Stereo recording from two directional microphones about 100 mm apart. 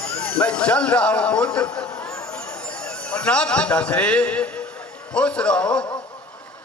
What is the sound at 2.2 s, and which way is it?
A man's voice, 10° left (ahead or behind).